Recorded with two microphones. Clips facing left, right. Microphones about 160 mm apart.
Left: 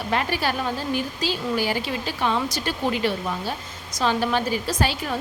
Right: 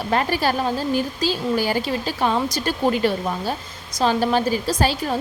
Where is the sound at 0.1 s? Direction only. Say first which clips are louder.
Right 4 dB; 40° right (ahead or behind).